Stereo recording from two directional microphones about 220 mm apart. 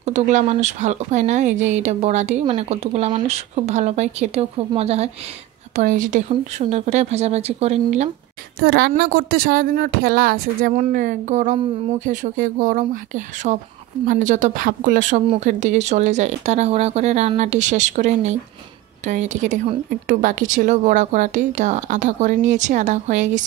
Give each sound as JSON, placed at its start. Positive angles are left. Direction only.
{"t": 0.0, "sound": "speech", "side_deg": -30}
{"t": 8.6, "sound": "speech", "side_deg": -45}